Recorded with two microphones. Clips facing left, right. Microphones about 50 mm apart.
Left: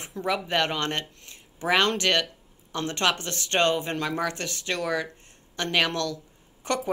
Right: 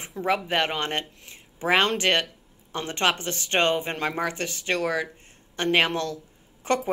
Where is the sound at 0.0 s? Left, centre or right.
Centre.